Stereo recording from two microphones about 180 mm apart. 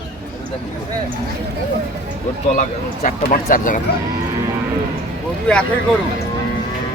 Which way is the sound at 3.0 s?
50° left (ahead or behind).